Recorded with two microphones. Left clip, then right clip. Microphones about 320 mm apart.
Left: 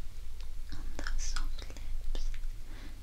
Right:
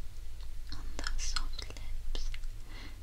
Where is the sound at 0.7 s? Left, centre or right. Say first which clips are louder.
Right 2 dB; centre.